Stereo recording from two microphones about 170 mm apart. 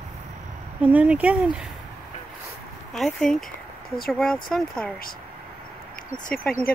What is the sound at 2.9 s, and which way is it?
Speech, 5° left (ahead or behind).